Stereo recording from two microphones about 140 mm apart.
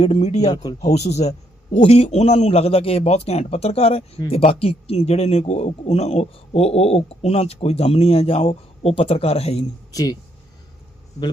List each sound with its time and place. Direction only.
0.0 s speech: 50° left (ahead or behind)
0.5 s speech: 30° left (ahead or behind)
0.8 s speech: 55° left (ahead or behind)
9.9 s speech: 25° left (ahead or behind)